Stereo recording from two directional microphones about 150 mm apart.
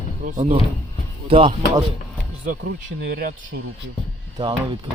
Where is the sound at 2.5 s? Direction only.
85° right.